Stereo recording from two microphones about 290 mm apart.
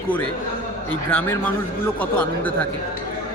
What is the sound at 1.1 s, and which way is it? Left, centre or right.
Speech, centre.